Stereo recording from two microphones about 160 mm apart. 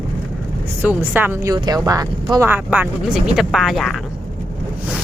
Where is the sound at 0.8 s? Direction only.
10° right (ahead or behind).